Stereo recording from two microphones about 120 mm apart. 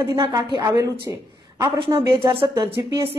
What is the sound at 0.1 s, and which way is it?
Speech, 25° right (ahead or behind).